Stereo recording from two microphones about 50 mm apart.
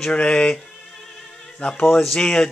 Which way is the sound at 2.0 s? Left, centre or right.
Centre.